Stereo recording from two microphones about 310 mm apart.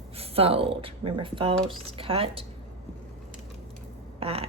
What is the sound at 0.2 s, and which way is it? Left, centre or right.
Speech, centre.